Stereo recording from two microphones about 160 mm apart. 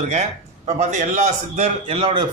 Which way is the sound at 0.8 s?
50° right (ahead or behind).